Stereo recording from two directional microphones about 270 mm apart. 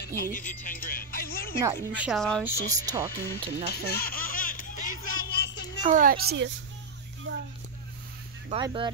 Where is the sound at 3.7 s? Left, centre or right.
Left.